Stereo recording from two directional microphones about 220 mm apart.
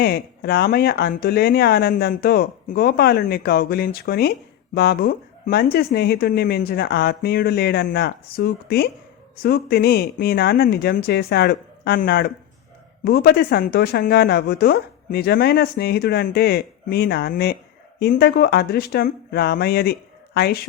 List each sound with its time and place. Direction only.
0.0 s speech: 45° left (ahead or behind)